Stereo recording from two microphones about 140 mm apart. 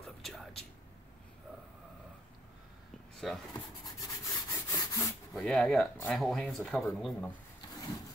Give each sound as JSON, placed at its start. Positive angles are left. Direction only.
{"t": 0.0, "sound": "a sound", "side_deg": 0}
{"t": 3.2, "sound": "speech", "side_deg": 0}
{"t": 3.8, "sound": "rub", "side_deg": 25}
{"t": 5.3, "sound": "speech", "side_deg": 0}